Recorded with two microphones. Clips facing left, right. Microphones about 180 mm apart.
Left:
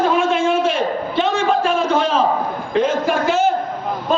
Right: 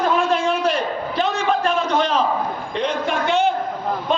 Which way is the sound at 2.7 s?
Centre (ahead or behind).